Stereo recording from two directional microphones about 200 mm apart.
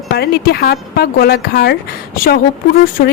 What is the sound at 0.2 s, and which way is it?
Speech, 55° left (ahead or behind).